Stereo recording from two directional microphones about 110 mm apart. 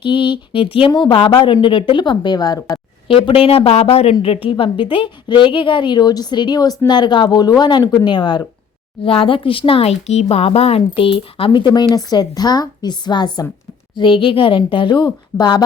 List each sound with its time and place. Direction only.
0.0 s a woman's voice: 50° left (ahead or behind)
3.1 s a woman's voice: 50° left (ahead or behind)
9.0 s speech: 55° left (ahead or behind)
11.7 s a woman's voice: 35° left (ahead or behind)